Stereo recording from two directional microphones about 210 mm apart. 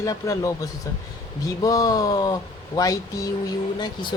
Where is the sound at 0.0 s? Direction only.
15° left (ahead or behind).